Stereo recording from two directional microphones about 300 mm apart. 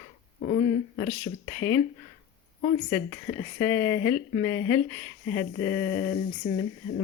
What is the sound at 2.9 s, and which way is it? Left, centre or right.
Speech, centre.